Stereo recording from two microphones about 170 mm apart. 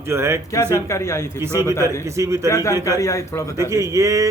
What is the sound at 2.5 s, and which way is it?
Speech, 20° left (ahead or behind).